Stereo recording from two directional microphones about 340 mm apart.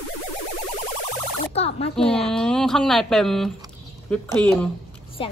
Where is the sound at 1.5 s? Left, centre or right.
Centre.